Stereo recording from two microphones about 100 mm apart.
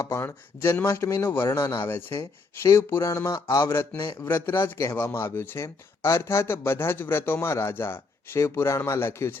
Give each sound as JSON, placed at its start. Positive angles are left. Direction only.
{"t": 0.2, "sound": "speech", "side_deg": 25}